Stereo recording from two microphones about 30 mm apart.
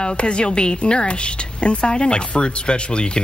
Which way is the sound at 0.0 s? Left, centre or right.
Left.